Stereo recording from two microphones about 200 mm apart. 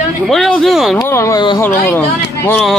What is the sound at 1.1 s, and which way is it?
Speech, 15° left (ahead or behind).